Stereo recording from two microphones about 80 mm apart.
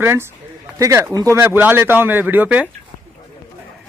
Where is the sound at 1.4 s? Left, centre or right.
Right.